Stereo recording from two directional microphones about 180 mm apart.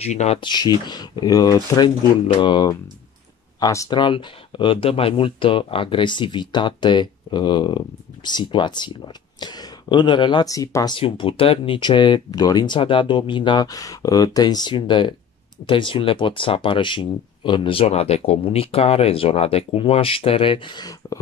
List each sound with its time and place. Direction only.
0.0 s speech: 35° left (ahead or behind)
0.4 s speech: 25° left (ahead or behind)